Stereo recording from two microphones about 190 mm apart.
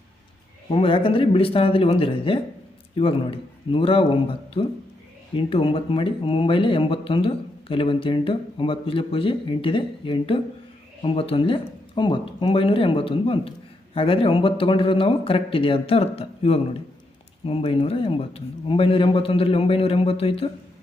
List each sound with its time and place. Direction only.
0.7 s speech: 30° left (ahead or behind)